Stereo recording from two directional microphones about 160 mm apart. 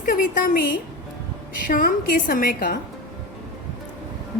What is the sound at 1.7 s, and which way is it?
A woman's voice, 60° left (ahead or behind).